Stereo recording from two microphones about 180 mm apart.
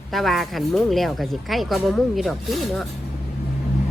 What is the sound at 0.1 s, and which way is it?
A woman's voice, centre (ahead or behind).